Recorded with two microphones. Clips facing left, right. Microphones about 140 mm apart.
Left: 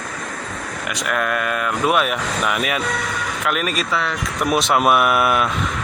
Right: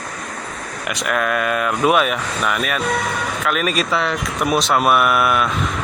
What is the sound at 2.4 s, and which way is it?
Speech, 15° left (ahead or behind).